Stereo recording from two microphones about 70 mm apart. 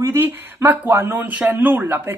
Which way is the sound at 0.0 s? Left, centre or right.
Right.